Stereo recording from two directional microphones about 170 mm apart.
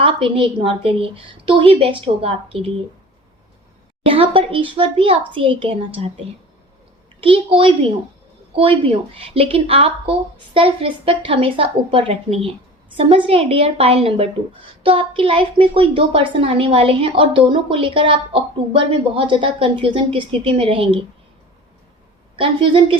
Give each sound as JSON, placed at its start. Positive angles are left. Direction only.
{"t": 0.0, "sound": "a woman's voice", "side_deg": -30}
{"t": 4.0, "sound": "a woman's voice", "side_deg": -30}
{"t": 7.2, "sound": "a woman's voice", "side_deg": -30}
{"t": 22.4, "sound": "a woman's voice", "side_deg": -30}